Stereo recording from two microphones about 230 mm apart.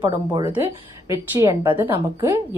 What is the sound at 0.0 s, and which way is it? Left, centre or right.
Speech, centre.